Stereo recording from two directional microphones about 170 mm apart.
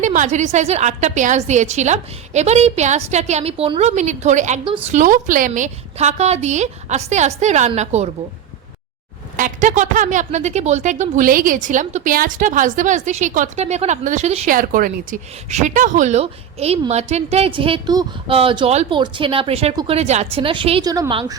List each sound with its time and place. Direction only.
0.0 s a woman's voice: 45° right (ahead or behind)
4.6 s a woman's voice: 30° right (ahead or behind)
4.9 s a woman's voice: 50° right (ahead or behind)
9.3 s a woman's voice: 50° right (ahead or behind)
14.5 s speech: 55° right (ahead or behind)
15.4 s a woman's voice: 45° right (ahead or behind)
20.8 s a woman's voice: 20° right (ahead or behind)